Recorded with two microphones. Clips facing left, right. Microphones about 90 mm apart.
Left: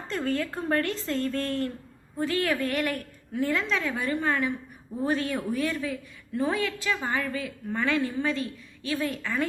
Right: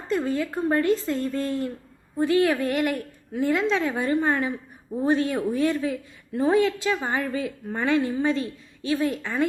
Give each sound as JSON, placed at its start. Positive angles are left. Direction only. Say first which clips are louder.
{"t": 0.1, "sound": "a man's voice", "louder": "right 4 dB", "side_deg": -15}